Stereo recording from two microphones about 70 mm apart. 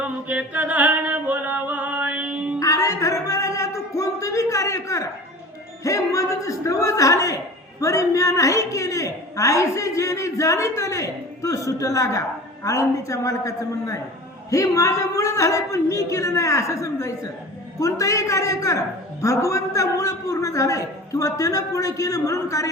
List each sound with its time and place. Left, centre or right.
0.0 s chant: centre
2.6 s music: left
5.8 s a man's voice: left